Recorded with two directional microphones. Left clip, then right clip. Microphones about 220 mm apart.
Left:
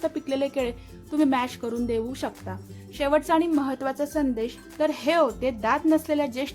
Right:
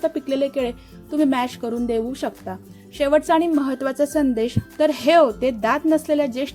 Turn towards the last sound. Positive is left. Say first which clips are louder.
# right 5 dB
turn(degrees=-10)  # may be behind; listen again after turning